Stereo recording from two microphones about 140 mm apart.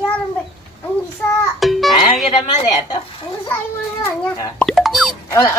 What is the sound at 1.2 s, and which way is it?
Speech, 10° left (ahead or behind).